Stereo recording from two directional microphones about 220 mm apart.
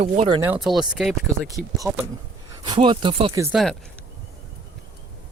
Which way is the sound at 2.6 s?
20° right (ahead or behind).